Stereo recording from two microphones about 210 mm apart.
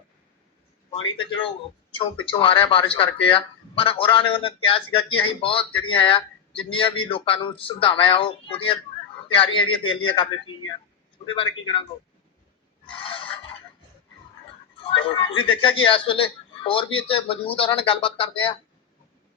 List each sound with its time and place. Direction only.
1.1 s speech: 25° left (ahead or behind)
12.9 s fowl: 25° left (ahead or behind)
14.8 s speech: 25° left (ahead or behind)